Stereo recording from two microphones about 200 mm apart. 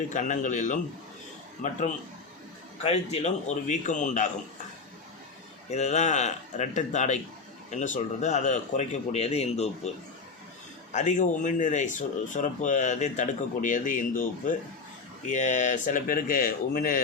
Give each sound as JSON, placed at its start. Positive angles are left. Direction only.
{"t": 0.1, "sound": "speech", "side_deg": 40}
{"t": 2.8, "sound": "speech", "side_deg": 30}
{"t": 5.7, "sound": "speech", "side_deg": 35}
{"t": 10.9, "sound": "speech", "side_deg": 35}